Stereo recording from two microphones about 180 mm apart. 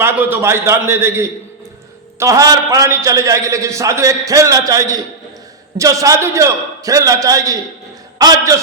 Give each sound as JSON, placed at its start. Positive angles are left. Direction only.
{"t": 0.0, "sound": "a man's voice", "side_deg": -10}